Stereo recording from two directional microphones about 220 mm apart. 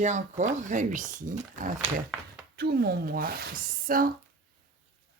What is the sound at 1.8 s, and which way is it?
Speech, 5° right (ahead or behind).